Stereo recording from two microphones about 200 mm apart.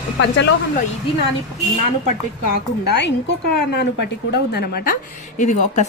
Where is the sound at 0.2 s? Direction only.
60° left (ahead or behind).